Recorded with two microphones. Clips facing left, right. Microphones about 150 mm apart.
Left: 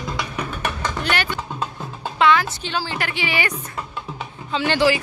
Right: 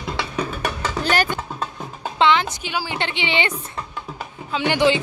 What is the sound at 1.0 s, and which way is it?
Speech, 40° right (ahead or behind).